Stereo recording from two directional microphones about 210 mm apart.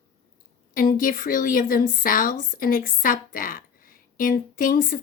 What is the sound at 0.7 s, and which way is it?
A woman's voice, 40° left (ahead or behind).